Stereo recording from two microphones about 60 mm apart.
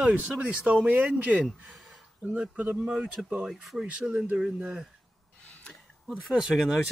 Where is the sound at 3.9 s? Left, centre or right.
Centre.